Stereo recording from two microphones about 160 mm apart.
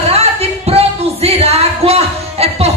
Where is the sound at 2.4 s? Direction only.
40° right (ahead or behind).